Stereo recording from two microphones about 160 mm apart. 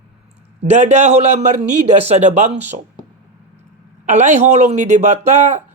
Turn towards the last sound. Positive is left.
turn(degrees=-45)  # may be behind; listen again after turning